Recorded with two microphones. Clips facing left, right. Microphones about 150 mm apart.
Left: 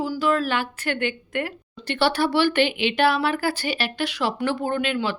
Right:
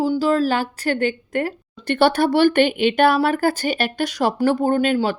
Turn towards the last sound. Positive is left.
turn(degrees=-40)  # may be behind; listen again after turning